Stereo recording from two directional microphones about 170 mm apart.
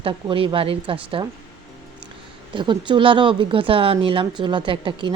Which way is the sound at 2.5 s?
25° right (ahead or behind).